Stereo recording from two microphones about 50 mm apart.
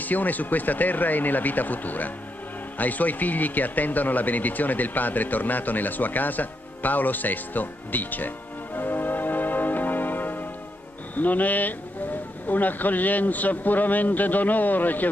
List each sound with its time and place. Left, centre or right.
0.0 s speech: left
8.7 s music: left
11.1 s speech: left